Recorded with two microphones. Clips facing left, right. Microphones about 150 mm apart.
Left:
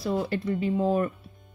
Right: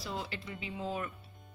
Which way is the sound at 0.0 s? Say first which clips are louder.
Left 13 dB; 50° left (ahead or behind).